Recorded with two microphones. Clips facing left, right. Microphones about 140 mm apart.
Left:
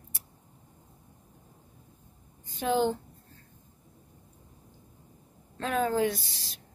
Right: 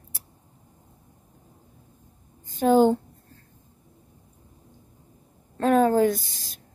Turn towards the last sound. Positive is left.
turn(degrees=-45)  # may be behind; listen again after turning